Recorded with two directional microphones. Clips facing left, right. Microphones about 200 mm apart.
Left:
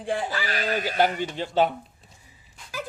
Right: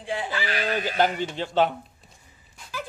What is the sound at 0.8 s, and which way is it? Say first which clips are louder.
Speech: left 1 dB; 10° left (ahead or behind).